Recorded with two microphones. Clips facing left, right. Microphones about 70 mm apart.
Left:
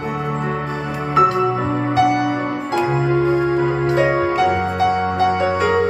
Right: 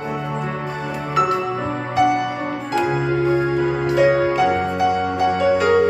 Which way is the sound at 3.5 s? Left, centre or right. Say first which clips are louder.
Left 1 dB; left.